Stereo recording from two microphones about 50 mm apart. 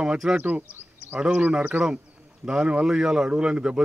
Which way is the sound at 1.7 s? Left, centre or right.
Right.